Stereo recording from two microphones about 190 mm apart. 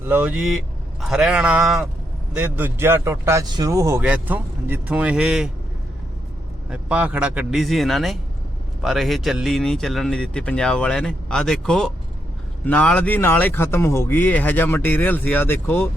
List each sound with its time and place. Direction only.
0.1 s speech: 5° right (ahead or behind)
6.7 s speech: 5° right (ahead or behind); by 15.9 s 10° left (ahead or behind)